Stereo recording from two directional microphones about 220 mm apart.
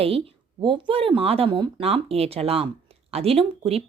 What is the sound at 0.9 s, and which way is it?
A woman's voice, 25° right (ahead or behind).